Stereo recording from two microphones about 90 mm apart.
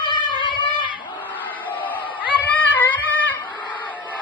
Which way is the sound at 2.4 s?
20° left (ahead or behind).